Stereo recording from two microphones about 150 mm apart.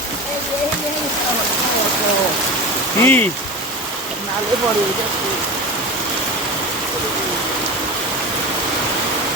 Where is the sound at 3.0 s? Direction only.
15° left (ahead or behind).